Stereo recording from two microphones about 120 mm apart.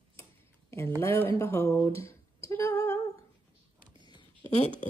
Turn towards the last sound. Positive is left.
turn(degrees=80)